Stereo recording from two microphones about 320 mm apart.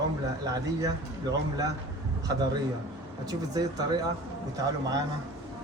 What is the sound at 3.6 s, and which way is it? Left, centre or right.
Speech, centre.